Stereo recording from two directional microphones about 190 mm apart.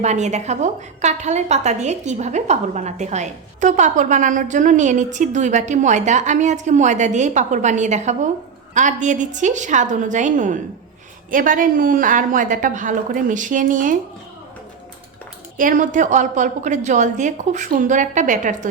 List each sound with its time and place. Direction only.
0.0 s a woman's voice: 35° right (ahead or behind)
15.5 s a woman's voice: 45° right (ahead or behind)